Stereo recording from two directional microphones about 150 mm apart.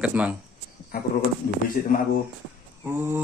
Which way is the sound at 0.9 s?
80° left.